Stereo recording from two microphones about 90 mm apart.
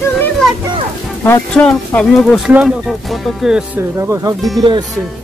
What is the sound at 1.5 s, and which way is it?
Speech, 10° left (ahead or behind).